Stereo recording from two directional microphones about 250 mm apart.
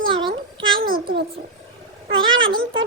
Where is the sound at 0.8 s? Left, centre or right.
Right.